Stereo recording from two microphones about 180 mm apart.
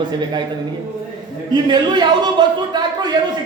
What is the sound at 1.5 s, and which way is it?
A man's voice, 25° right (ahead or behind).